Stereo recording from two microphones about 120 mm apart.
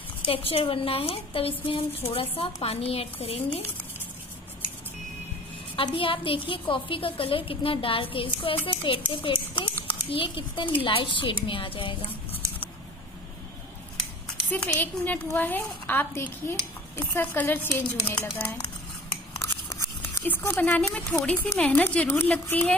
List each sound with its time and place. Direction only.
0.2 s a woman's voice: 50° left (ahead or behind)
5.8 s a woman's voice: 45° left (ahead or behind)
9.2 s a sound: 45° left (ahead or behind)
10.0 s a woman's voice: 45° left (ahead or behind)
14.5 s a woman's voice: 15° left (ahead or behind)